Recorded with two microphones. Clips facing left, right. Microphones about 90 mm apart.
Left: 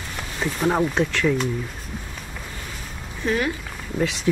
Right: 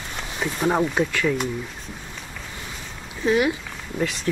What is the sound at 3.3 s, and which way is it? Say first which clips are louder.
Speech: right 3 dB; 10° right (ahead or behind).